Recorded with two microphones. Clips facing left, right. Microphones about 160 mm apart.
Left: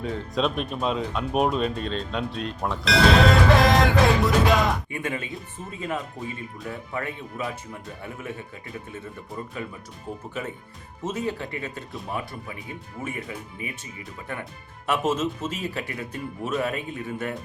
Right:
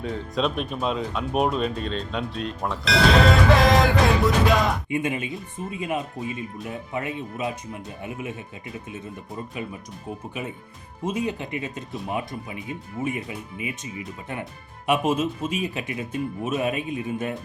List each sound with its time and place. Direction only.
0.0 s speech: centre (ahead or behind)
4.9 s speech: 20° right (ahead or behind)
11.0 s speech: 15° right (ahead or behind)
14.8 s speech: 15° right (ahead or behind)